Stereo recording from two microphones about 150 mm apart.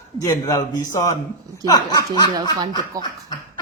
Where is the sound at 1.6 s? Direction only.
25° left (ahead or behind).